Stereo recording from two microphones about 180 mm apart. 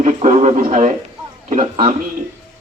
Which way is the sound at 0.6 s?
40° right (ahead or behind).